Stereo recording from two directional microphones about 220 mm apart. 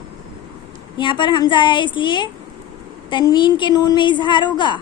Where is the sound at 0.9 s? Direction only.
20° left (ahead or behind).